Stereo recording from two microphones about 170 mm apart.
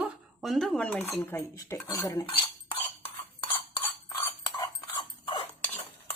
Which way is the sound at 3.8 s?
20° left (ahead or behind).